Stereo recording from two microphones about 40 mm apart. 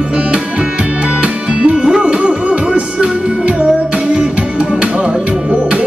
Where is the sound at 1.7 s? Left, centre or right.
Centre.